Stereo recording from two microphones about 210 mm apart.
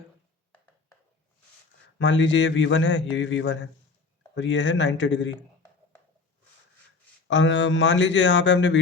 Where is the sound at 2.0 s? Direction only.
60° left (ahead or behind).